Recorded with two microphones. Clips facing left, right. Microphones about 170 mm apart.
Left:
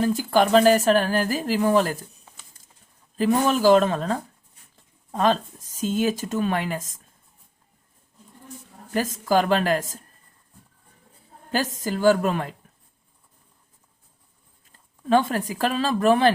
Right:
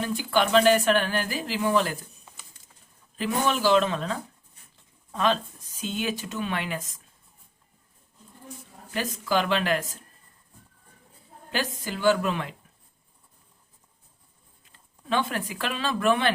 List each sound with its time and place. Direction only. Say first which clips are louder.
0.0 s speech: left 5 dB; 40° left (ahead or behind)
3.2 s speech: left 5 dB; 45° left (ahead or behind)
8.9 s speech: left 5 dB; 45° left (ahead or behind)
11.5 s speech: left 5 dB; 45° left (ahead or behind)
14.7 s speech: left 9 dB; 40° left (ahead or behind)